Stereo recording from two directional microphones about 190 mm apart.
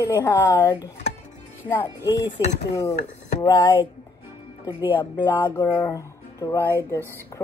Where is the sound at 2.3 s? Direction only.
35° left (ahead or behind).